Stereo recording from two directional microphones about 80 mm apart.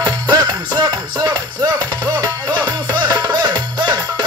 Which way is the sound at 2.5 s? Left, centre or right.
Right.